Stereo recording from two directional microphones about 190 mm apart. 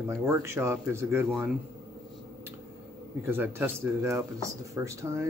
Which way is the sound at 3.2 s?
10° right (ahead or behind).